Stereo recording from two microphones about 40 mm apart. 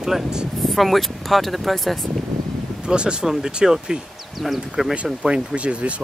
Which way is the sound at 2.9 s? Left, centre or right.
Right.